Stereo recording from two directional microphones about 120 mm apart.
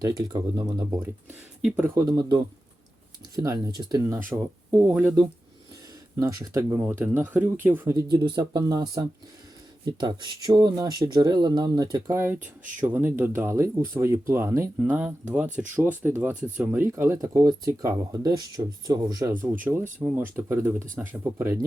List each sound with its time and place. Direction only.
0.0 s speech: 35° right (ahead or behind)
1.6 s speech: 10° right (ahead or behind)
2.0 s speech: 30° right (ahead or behind)
6.1 s speech: 35° right (ahead or behind)
7.9 s speech: 35° right (ahead or behind)
19.3 s speech: 20° right (ahead or behind)